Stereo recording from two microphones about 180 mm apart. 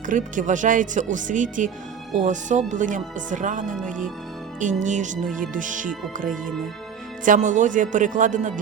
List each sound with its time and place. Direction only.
0.1 s speech: 45° right (ahead or behind)
7.3 s speech: 45° right (ahead or behind)